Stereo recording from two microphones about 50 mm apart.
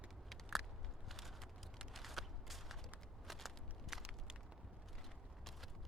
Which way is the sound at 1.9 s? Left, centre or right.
Centre.